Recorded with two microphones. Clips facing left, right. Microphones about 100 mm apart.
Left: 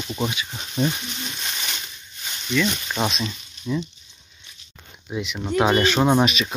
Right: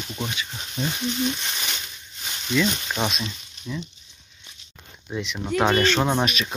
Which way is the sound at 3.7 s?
15° left (ahead or behind).